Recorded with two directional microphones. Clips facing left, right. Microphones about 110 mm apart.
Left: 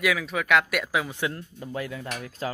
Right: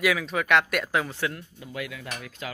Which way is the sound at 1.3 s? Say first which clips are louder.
Left 3 dB; 35° left (ahead or behind).